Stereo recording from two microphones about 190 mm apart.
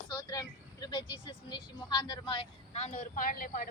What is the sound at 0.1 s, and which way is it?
Speech, 20° left (ahead or behind).